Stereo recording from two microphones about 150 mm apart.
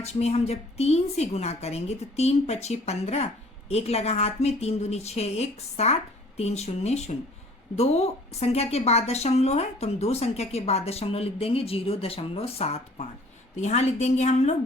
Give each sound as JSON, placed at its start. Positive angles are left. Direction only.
{"t": 0.0, "sound": "speech", "side_deg": 45}